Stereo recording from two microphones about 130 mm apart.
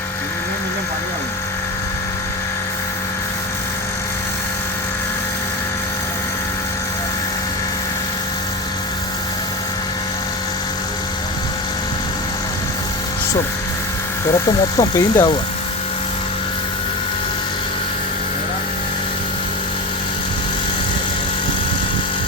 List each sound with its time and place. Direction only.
14.8 s speech: 25° left (ahead or behind)